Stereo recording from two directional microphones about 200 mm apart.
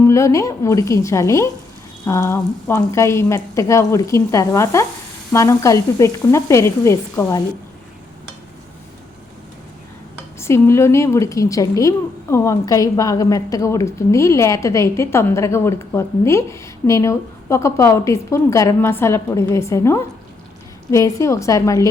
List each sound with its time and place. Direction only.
0.0 s a woman's voice: 15° left (ahead or behind)
10.4 s a woman's voice: 15° left (ahead or behind)